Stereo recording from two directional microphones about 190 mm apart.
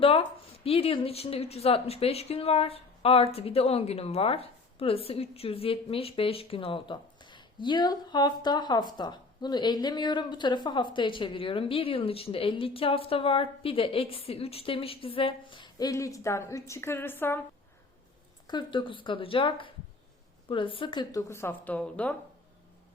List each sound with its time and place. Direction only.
0.0 s a woman's voice: 30° left (ahead or behind); by 17.4 s 10° left (ahead or behind)
18.4 s a woman's voice: 25° left (ahead or behind); by 22.1 s 5° left (ahead or behind)